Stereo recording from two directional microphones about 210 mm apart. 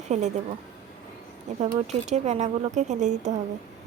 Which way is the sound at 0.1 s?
35° right (ahead or behind).